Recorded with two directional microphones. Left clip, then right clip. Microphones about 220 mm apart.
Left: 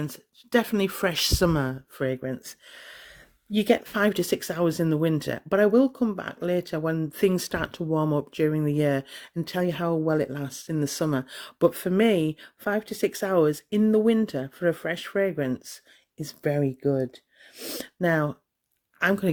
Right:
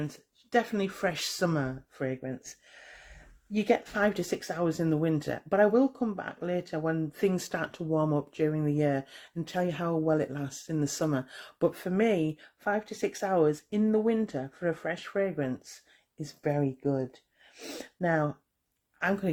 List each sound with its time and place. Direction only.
0.0 s speech: 50° left (ahead or behind)